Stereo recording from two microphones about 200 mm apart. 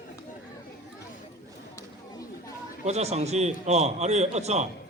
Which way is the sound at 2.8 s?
35° right (ahead or behind).